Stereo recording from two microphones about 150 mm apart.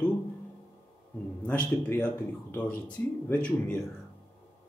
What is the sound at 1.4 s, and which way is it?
A man's voice, 10° left (ahead or behind).